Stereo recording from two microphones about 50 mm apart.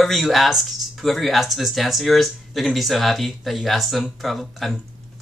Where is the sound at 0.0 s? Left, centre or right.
Centre.